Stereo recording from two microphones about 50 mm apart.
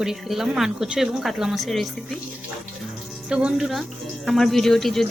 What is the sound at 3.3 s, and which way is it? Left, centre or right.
Speech, centre.